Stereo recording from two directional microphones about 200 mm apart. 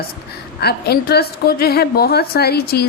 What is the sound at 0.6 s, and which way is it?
A woman's voice, 50° left (ahead or behind).